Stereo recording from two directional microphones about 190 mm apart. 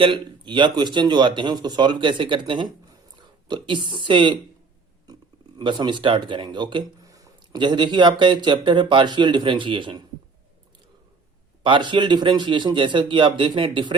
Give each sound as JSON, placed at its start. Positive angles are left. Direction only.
{"t": 0.0, "sound": "speech", "side_deg": -25}
{"t": 5.5, "sound": "speech", "side_deg": -25}
{"t": 11.6, "sound": "speech", "side_deg": -25}